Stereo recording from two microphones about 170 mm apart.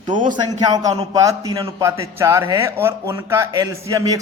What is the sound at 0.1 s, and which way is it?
Speech, 50° right (ahead or behind).